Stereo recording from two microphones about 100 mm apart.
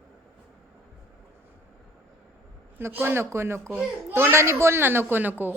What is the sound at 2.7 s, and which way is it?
A child's voice, 20° right (ahead or behind).